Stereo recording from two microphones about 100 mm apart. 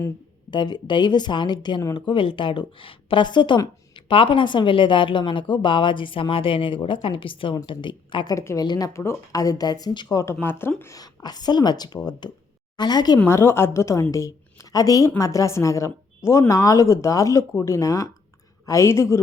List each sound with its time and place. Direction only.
0.5 s a woman's voice: 50° left (ahead or behind)
8.4 s speech: 30° left (ahead or behind)
8.6 s speech: 45° left (ahead or behind)
8.9 s speech: 30° left (ahead or behind); by 10.2 s 45° left (ahead or behind)
10.4 s a woman's voice: 20° left (ahead or behind)
10.9 s speech: 40° left (ahead or behind)
13.2 s a woman's voice: 25° left (ahead or behind)